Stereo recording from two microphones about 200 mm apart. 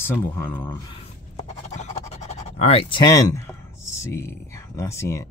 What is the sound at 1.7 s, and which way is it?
Speech, 35° left (ahead or behind).